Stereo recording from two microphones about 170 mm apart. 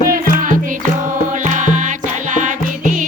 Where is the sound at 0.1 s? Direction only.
50° right (ahead or behind).